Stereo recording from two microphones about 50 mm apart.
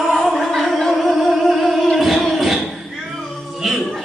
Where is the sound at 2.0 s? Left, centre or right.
Centre.